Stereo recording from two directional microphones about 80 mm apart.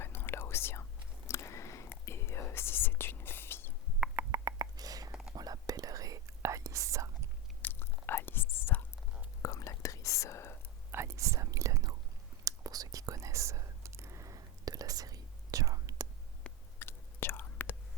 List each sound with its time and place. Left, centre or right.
0.0 s whispering: left
4.3 s a sound: right
5.3 s whispering: right
7.6 s whispering: left
9.4 s whispering: left
10.9 s whispering: right
16.8 s whispering: left